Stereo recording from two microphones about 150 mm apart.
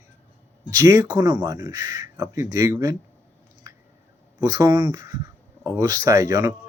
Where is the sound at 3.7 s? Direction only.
20° right (ahead or behind).